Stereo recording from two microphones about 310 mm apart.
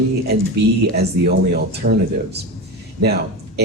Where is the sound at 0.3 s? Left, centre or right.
Right.